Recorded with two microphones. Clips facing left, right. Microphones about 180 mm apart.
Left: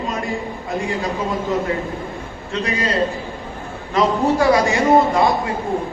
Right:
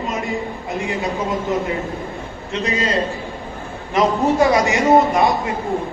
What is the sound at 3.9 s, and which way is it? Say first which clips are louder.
A man's voice: right 1 dB; 20° right (ahead or behind).